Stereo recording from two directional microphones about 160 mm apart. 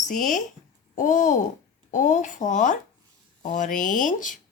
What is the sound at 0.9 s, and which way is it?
Speech, 50° left (ahead or behind).